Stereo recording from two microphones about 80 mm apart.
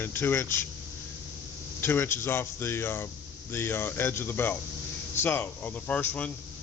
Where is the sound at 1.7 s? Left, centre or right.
Left.